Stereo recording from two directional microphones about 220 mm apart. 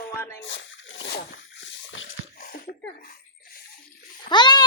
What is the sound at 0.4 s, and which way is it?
Splash, 60° left (ahead or behind).